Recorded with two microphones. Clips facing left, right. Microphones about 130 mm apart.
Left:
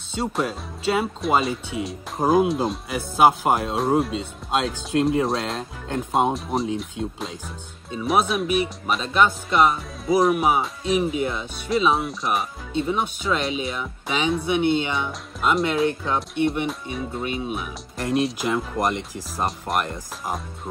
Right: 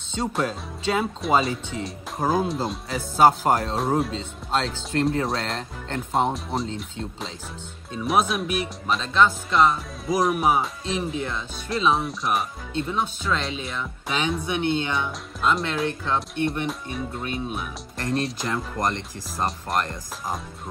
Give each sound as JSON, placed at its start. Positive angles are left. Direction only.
{"t": 0.1, "sound": "speech", "side_deg": 5}
{"t": 2.1, "sound": "speech", "side_deg": 15}
{"t": 2.4, "sound": "speech", "side_deg": 0}
{"t": 15.9, "sound": "speech", "side_deg": 15}